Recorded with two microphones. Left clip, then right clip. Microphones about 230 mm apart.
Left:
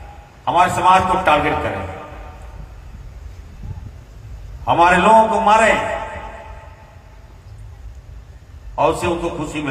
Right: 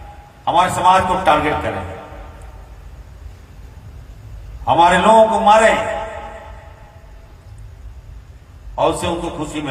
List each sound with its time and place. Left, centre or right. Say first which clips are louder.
0.4 s a man's voice: even; right
4.6 s a man's voice: right 1 dB; right
8.7 s a man's voice: even; right